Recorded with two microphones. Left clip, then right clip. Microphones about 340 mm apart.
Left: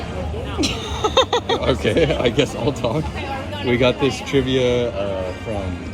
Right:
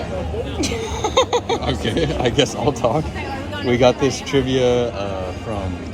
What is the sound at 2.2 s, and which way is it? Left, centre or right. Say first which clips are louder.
Speech: right 1 dB; centre.